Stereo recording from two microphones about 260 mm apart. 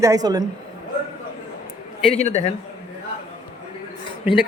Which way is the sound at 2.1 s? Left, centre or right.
Left.